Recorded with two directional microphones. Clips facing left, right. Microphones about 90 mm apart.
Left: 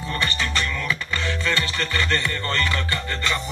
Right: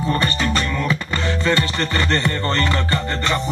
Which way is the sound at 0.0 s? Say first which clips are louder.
Right 6 dB; 25° right (ahead or behind).